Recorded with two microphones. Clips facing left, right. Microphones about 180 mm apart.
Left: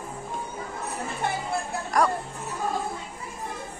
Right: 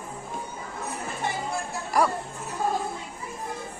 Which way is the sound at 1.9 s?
5° right (ahead or behind).